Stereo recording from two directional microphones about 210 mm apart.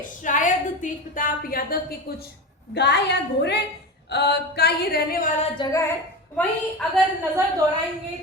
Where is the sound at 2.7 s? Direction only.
55° left (ahead or behind).